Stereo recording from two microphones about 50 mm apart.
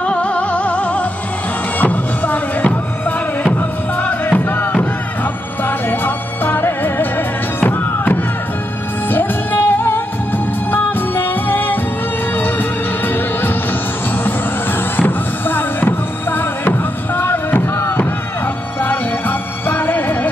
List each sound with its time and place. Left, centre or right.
0.0 s music: left
4.0 s music: left
5.7 s music: left